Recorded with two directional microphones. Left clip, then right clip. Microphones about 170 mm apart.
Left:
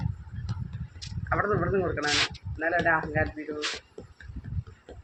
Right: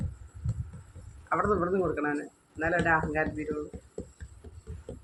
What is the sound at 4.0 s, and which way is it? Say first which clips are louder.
Music: right 4 dB; 30° right (ahead or behind).